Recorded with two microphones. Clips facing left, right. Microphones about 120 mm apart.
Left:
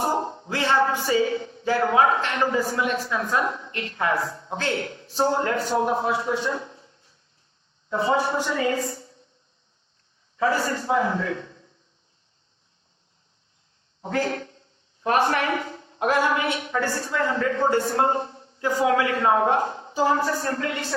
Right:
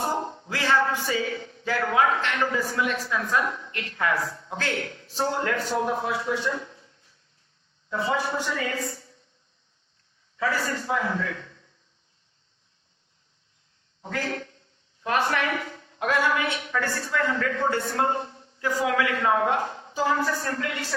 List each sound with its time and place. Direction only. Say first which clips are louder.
0.0 s a woman's voice: left 3 dB; 25° left (ahead or behind)
10.3 s a man's voice: left 4 dB; 30° left (ahead or behind)
14.0 s a woman's voice: left 5 dB; 30° left (ahead or behind)